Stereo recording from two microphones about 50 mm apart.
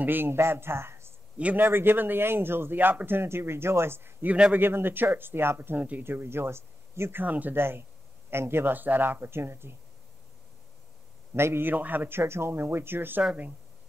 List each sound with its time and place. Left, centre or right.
0.0 s a man's voice: right
1.6 s speech: right
3.1 s speech: right
5.8 s a man's voice: right
6.0 s speech: right
7.2 s a man's voice: right
7.5 s a man's voice: right
8.7 s speech: right
11.3 s speech: right
11.7 s a man's voice: right
12.2 s speech: right